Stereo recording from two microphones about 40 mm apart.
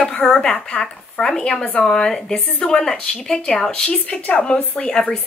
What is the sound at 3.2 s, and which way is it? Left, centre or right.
Speech, centre.